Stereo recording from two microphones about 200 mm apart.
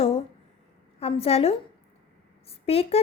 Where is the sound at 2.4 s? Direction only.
30° left (ahead or behind).